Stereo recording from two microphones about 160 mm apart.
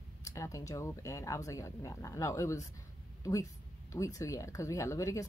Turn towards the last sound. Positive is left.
turn(degrees=20)  # may be behind; listen again after turning